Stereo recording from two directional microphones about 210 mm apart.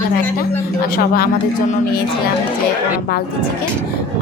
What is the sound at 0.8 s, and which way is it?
Speech, 45° left (ahead or behind).